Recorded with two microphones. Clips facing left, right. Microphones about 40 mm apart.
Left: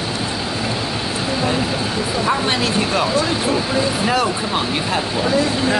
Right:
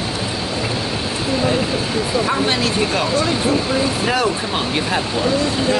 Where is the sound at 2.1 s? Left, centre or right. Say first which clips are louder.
Even; centre.